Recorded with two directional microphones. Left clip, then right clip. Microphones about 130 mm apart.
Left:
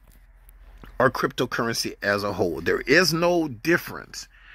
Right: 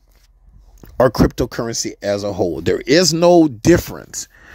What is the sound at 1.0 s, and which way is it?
Speech, 50° right (ahead or behind).